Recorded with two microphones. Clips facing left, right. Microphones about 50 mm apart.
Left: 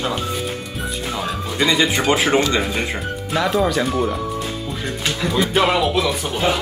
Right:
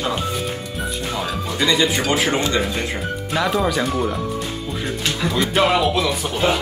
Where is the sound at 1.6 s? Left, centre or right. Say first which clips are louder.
Left 1 dB; centre.